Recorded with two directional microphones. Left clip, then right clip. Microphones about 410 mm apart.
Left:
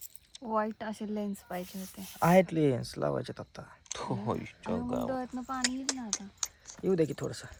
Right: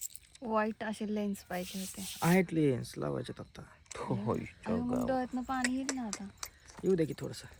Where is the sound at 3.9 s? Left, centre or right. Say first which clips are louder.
Left 1 dB; centre.